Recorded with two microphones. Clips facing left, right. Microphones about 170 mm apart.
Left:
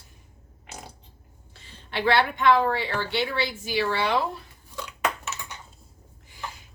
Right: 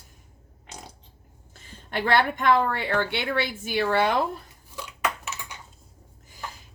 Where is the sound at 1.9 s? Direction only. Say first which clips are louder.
Even; 50° right (ahead or behind).